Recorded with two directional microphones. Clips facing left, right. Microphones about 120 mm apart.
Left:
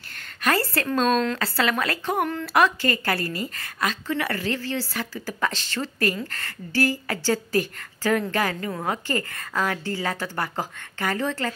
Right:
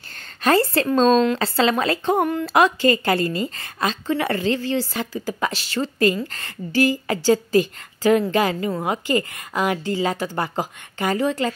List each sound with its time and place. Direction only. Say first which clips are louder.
0.4 s speech: right 6 dB; 25° right (ahead or behind)